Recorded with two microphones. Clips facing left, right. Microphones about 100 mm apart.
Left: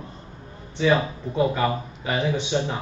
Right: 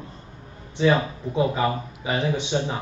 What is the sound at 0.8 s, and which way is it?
Speech, 10° right (ahead or behind).